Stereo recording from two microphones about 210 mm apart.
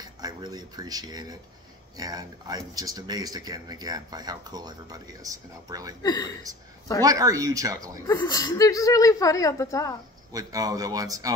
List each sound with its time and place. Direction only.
0.0 s speech: 20° right (ahead or behind)
7.0 s speech: 15° right (ahead or behind)
8.1 s speech: 15° left (ahead or behind)
10.3 s speech: 15° right (ahead or behind)